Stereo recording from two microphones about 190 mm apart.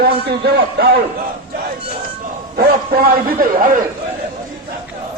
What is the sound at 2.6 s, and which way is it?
A man's voice, 50° right (ahead or behind).